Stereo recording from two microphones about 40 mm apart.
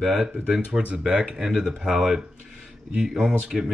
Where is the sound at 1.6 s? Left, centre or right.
Centre.